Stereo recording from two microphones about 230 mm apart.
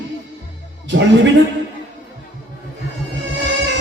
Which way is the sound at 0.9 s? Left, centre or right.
Right.